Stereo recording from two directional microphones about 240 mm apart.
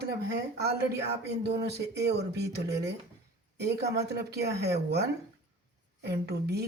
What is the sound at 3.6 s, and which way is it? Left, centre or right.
A man's voice, right.